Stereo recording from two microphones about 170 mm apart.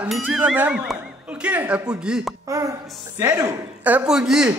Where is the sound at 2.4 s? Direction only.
20° right (ahead or behind).